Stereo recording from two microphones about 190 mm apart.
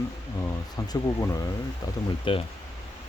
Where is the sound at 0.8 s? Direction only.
15° left (ahead or behind).